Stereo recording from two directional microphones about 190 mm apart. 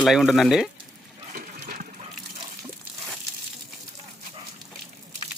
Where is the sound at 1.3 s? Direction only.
45° right (ahead or behind).